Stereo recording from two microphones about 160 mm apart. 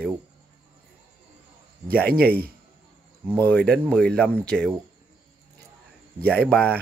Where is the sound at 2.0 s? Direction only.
75° right (ahead or behind).